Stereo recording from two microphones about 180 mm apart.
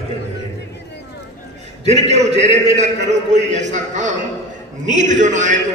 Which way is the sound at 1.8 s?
40° right (ahead or behind).